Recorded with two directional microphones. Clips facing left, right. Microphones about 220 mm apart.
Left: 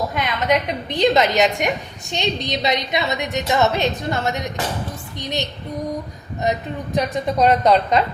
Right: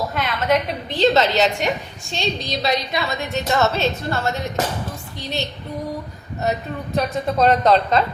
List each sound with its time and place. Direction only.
0.1 s a woman's voice: 15° left (ahead or behind)